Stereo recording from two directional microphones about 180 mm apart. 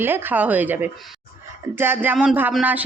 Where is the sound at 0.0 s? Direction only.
10° right (ahead or behind).